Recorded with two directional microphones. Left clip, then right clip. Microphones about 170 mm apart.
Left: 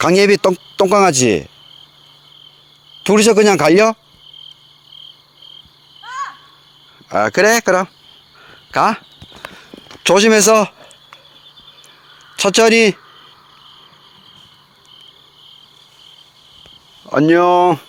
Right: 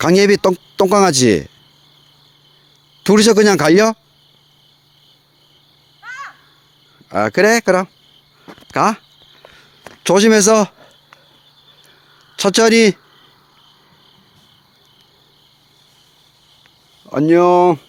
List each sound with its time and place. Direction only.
0.0 s speech: 20° right (ahead or behind)
3.0 s speech: 35° right (ahead or behind)
7.1 s speech: 10° right (ahead or behind)
10.0 s speech: 20° right (ahead or behind)
12.4 s speech: 25° right (ahead or behind)
17.1 s speech: 10° right (ahead or behind)